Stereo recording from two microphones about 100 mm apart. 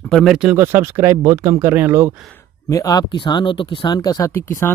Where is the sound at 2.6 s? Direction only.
40° left (ahead or behind).